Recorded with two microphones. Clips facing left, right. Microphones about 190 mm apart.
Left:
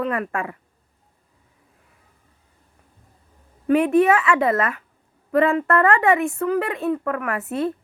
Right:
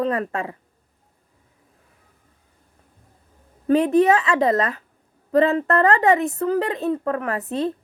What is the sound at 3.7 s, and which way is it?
Speech, 35° right (ahead or behind).